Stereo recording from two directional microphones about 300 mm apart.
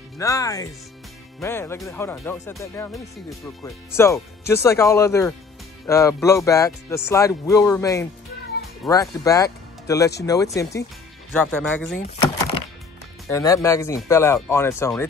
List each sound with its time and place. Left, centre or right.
0.2 s speech: centre
13.3 s speech: centre